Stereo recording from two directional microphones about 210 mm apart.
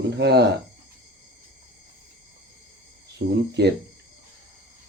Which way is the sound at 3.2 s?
45° right (ahead or behind).